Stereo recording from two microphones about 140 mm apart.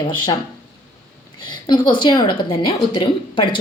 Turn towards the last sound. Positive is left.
turn(degrees=35)  # may be behind; listen again after turning